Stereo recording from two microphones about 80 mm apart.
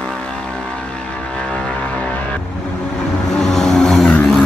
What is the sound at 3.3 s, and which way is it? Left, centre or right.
Vehicle, centre.